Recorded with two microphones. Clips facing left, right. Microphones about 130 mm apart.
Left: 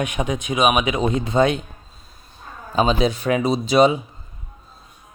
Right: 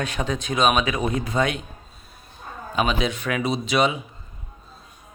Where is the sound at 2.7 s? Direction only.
30° left (ahead or behind).